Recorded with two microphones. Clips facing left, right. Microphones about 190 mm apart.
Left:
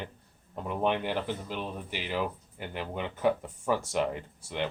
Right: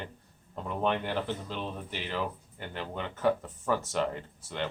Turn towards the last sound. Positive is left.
turn(degrees=10)  # may be behind; listen again after turning